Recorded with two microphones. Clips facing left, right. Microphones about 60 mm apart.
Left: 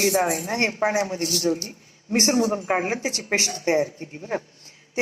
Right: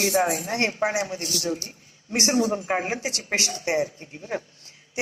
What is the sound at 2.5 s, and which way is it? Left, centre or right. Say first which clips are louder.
A woman's voice: left 2 dB; left.